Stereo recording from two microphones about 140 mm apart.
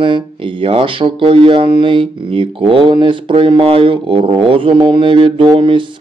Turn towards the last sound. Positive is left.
turn(degrees=-35)  # may be behind; listen again after turning